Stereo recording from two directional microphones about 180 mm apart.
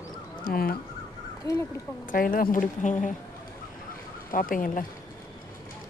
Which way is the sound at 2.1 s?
50° left (ahead or behind).